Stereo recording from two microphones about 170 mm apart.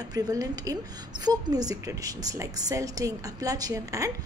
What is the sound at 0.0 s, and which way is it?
A woman's voice, 20° right (ahead or behind).